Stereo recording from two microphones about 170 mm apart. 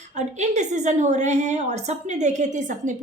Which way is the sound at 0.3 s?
45° right (ahead or behind).